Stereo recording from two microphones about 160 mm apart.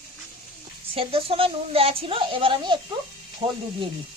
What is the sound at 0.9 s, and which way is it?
A woman's voice, 35° right (ahead or behind).